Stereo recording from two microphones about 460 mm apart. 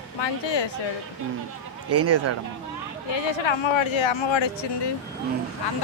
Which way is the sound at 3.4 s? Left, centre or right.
Left.